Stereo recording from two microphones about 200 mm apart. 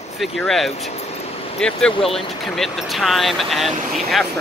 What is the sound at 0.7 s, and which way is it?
Vehicle, 30° left (ahead or behind).